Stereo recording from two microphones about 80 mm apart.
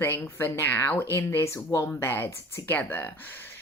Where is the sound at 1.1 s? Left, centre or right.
Left.